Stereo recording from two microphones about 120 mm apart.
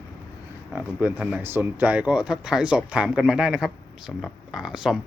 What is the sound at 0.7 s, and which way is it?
Speech, 10° right (ahead or behind).